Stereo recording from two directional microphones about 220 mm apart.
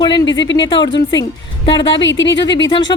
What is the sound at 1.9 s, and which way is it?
Speech, 55° left (ahead or behind).